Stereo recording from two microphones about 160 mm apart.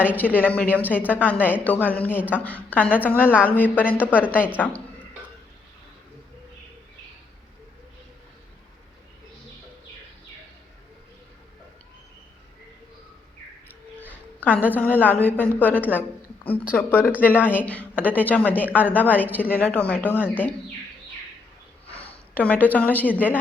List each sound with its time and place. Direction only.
0.2 s a woman's voice: 10° left (ahead or behind)
14.0 s a woman's voice: 10° left (ahead or behind)
21.8 s sniff: 35° left (ahead or behind)
22.4 s a woman's voice: 10° left (ahead or behind)